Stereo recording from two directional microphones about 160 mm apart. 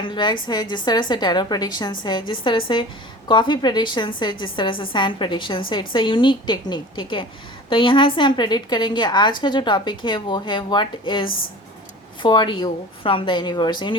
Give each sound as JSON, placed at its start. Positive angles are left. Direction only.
{"t": 0.0, "sound": "a woman's voice", "side_deg": 30}